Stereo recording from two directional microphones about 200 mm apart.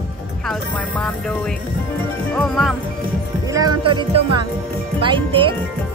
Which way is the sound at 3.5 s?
20° right (ahead or behind).